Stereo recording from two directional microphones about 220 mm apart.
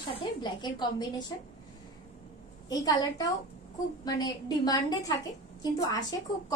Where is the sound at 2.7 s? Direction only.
15° left (ahead or behind).